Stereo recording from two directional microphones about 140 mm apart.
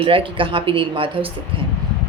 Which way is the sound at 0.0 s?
40° right (ahead or behind).